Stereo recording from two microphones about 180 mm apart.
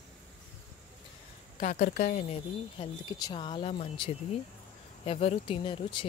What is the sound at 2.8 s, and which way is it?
Speech, 20° left (ahead or behind).